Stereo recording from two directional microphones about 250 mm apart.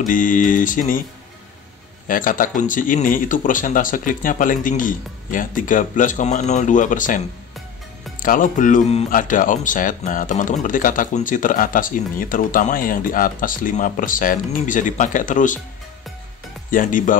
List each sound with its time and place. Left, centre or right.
0.0 s speech: left
2.0 s speech: left
16.7 s speech: left